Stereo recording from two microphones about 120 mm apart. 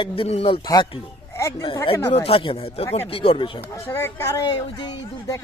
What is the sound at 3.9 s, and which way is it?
Speech, 20° left (ahead or behind).